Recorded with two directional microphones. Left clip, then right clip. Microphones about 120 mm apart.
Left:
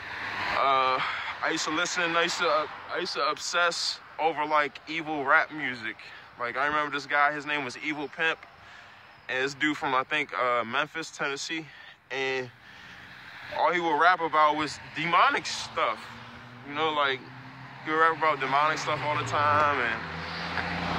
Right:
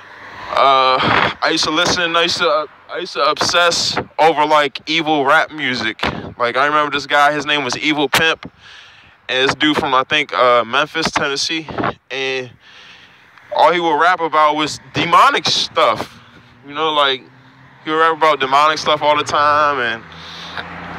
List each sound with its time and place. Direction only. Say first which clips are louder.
0.1 s vehicle: even; 15° left (ahead or behind)
0.6 s speech: right 13 dB; 65° right (ahead or behind)
5.6 s speech: right 15 dB; 90° right
9.2 s speech: right 13 dB; 65° right (ahead or behind)
13.6 s speech: right 12 dB; 55° right (ahead or behind); by 15.4 s 85° right
15.4 s speech: right 15 dB; 55° right (ahead or behind)
20.3 s vehicle: right 5 dB; 35° right (ahead or behind)
20.6 s vehicle: right 1 dB; 25° left (ahead or behind)